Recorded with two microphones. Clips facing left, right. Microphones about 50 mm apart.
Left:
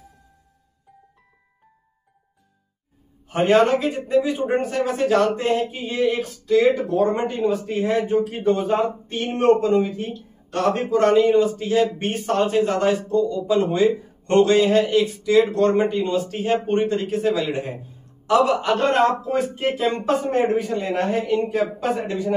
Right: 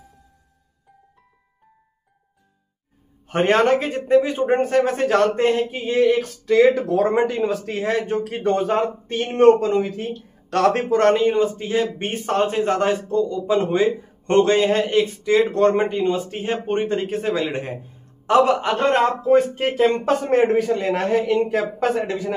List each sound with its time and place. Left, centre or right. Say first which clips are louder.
3.3 s a man's voice: even; right
10.5 s a man's voice: right 3 dB; right
20.2 s speech: right 3 dB; right